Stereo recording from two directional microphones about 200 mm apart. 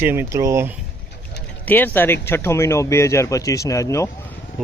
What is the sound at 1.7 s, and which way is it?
Speech, 10° left (ahead or behind).